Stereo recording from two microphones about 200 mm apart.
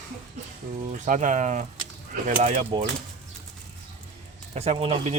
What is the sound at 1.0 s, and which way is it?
Speech, 40° right (ahead or behind).